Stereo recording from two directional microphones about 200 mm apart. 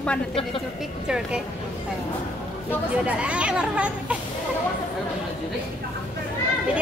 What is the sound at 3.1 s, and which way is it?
Speech, 5° right (ahead or behind).